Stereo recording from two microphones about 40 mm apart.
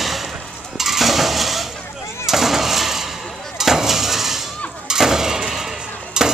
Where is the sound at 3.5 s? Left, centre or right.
Centre.